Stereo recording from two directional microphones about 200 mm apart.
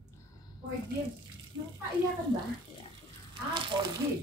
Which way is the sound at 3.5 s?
25° right (ahead or behind).